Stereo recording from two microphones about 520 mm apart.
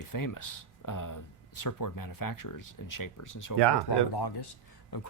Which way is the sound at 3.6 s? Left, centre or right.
Right.